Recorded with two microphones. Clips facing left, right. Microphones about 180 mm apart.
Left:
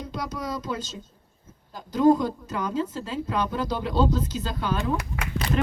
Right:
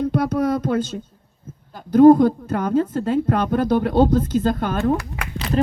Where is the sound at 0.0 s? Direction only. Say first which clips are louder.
Right 13 dB; 55° right (ahead or behind).